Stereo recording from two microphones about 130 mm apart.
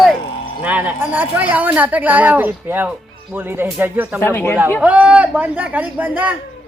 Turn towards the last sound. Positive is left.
turn(degrees=-10)  # may be behind; listen again after turning